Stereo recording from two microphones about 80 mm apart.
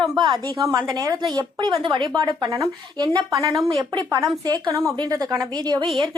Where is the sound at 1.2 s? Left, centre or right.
Right.